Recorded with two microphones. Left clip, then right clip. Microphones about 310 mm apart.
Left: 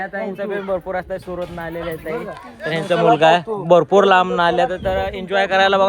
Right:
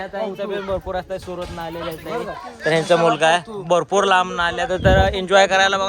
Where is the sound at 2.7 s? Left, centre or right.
Right.